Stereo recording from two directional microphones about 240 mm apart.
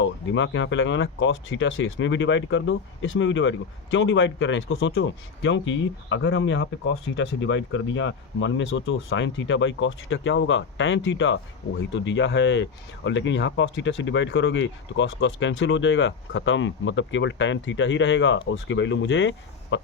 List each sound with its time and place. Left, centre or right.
0.0 s speech: left